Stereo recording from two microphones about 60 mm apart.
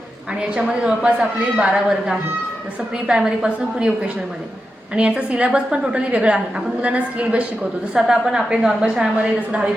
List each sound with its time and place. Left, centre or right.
0.5 s a woman's voice: centre
7.9 s a woman's voice: centre
9.1 s speech: right